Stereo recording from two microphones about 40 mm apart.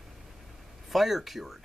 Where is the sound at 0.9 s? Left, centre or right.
Centre.